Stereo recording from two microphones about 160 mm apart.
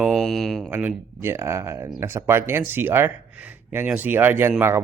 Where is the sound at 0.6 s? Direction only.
10° right (ahead or behind).